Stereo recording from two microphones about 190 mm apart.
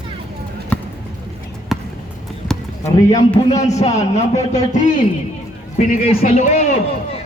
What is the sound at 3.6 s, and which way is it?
A man's voice, 35° left (ahead or behind).